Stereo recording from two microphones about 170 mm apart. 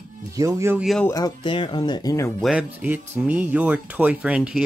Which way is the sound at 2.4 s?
5° right (ahead or behind).